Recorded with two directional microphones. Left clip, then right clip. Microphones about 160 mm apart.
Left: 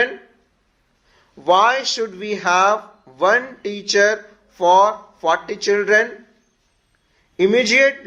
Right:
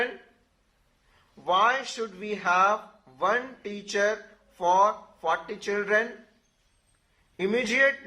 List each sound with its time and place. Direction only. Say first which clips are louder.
1.5 s speech: left 9 dB; 30° left (ahead or behind)
7.3 s speech: left 10 dB; 30° left (ahead or behind)